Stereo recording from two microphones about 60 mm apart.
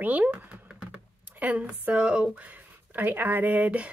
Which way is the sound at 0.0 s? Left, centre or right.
Right.